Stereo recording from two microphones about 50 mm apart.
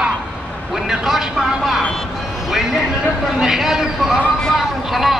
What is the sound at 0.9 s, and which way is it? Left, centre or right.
Speech, centre.